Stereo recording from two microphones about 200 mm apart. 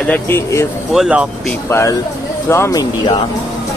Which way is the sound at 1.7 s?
15° left (ahead or behind).